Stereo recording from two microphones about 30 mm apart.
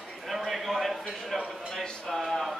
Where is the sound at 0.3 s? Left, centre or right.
Centre.